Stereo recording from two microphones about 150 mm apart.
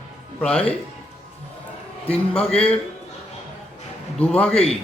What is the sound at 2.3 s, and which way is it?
Speech, 40° left (ahead or behind).